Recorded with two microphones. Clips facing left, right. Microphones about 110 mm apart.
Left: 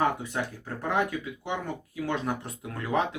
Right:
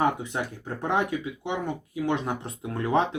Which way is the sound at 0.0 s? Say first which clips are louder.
Right 2 dB; 20° right (ahead or behind).